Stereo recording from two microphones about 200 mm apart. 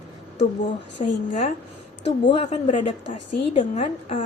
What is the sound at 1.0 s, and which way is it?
Speech, 35° left (ahead or behind).